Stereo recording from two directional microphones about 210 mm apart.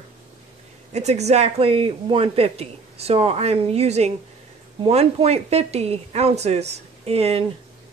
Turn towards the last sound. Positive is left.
turn(degrees=-30)  # may be behind; listen again after turning